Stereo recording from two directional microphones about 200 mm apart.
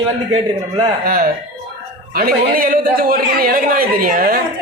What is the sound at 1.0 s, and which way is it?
Speech, 45° right (ahead or behind).